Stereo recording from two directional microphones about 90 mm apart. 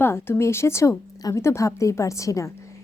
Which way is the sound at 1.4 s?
30° left (ahead or behind).